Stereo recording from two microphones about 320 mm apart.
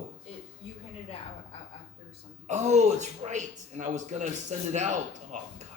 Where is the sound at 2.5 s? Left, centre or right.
Right.